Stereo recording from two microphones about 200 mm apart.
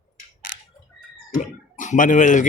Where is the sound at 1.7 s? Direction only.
40° left (ahead or behind).